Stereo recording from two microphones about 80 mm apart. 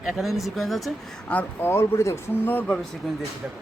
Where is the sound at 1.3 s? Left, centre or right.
Left.